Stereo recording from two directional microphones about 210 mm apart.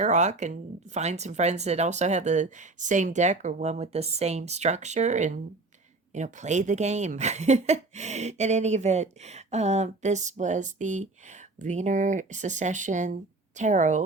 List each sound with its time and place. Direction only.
0.0 s speech: 35° right (ahead or behind)